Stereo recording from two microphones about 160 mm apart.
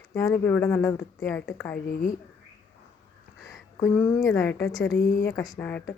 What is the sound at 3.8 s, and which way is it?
Speech, 15° left (ahead or behind).